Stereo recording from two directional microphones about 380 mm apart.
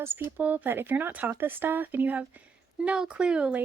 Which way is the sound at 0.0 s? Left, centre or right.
Centre.